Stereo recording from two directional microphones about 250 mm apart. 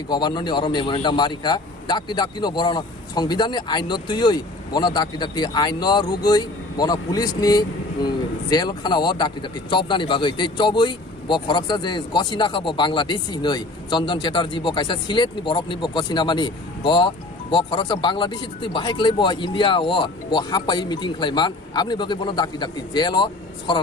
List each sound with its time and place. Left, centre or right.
0.1 s a man's voice: centre